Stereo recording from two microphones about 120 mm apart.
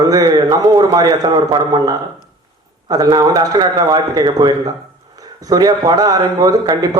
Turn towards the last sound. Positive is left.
turn(degrees=-30)  # may be behind; listen again after turning